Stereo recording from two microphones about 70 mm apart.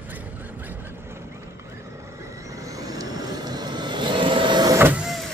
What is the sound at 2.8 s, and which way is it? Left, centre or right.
Vehicle, right.